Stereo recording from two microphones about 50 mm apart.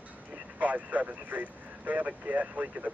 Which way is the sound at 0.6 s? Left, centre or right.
Right.